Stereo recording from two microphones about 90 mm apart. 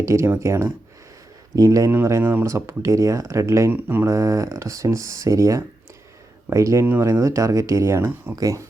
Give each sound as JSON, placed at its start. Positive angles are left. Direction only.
{"t": 0.0, "sound": "speech", "side_deg": -30}